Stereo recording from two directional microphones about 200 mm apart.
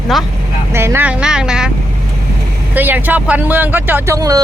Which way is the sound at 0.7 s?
10° right (ahead or behind).